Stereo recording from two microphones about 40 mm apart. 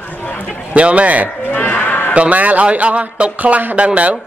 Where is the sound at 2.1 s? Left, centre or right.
Right.